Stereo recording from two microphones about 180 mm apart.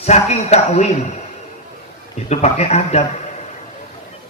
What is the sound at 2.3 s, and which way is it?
Speech, 35° left (ahead or behind).